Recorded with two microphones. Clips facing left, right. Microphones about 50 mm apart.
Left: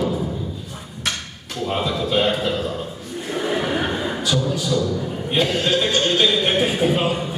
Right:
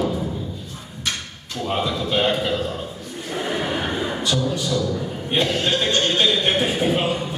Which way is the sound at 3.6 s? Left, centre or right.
Centre.